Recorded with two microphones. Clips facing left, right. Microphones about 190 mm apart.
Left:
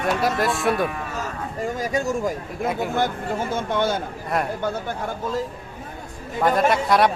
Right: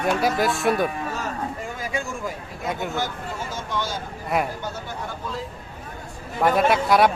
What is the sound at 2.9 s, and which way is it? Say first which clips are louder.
Speech: left 5 dB; 55° left (ahead or behind).